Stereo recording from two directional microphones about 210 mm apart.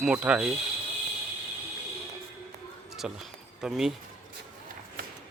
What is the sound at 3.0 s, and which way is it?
Speech, 5° right (ahead or behind).